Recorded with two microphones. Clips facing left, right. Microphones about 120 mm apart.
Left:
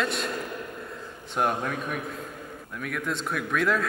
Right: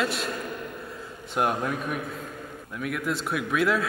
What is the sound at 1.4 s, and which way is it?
A man's voice, 5° right (ahead or behind).